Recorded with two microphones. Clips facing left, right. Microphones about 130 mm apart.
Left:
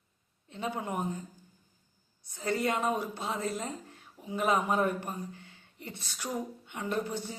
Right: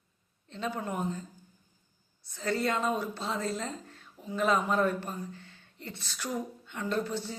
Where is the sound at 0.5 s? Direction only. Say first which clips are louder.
Even; 15° left (ahead or behind).